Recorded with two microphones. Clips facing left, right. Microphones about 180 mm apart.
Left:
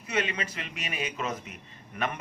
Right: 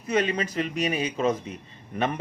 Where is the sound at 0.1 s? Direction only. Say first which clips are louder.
Right 6 dB; 35° right (ahead or behind).